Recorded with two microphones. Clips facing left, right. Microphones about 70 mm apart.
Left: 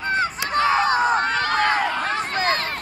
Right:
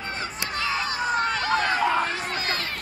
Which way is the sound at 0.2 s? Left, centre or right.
Left.